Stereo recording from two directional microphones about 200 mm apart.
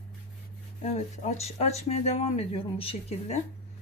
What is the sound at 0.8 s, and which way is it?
Speech, 35° left (ahead or behind).